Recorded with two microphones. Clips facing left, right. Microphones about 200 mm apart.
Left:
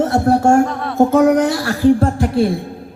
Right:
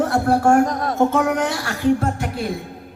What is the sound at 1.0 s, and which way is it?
A man's voice, 40° left (ahead or behind).